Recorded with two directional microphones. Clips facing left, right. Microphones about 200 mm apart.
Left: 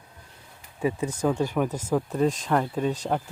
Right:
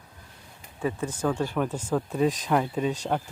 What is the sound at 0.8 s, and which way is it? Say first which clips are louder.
Speech: left 3 dB; 10° left (ahead or behind).